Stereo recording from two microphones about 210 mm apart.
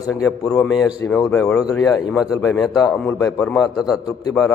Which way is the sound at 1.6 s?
15° left (ahead or behind).